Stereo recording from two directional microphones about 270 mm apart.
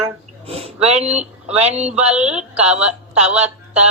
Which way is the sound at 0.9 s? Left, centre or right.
Right.